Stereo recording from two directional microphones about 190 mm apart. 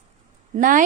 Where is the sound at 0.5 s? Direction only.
45° right (ahead or behind).